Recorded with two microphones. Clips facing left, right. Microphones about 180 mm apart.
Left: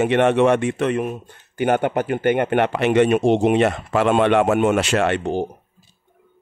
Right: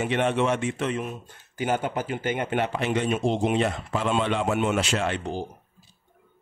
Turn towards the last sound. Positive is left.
turn(degrees=65)  # may be behind; listen again after turning